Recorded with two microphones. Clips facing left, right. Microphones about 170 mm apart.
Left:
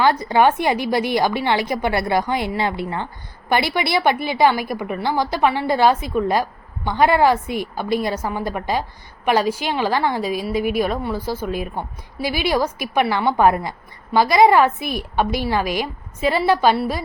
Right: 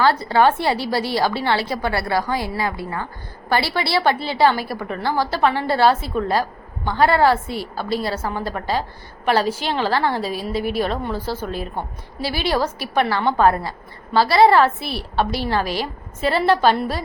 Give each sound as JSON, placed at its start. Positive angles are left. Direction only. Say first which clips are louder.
{"t": 0.0, "sound": "a woman's voice", "louder": "even", "side_deg": 15}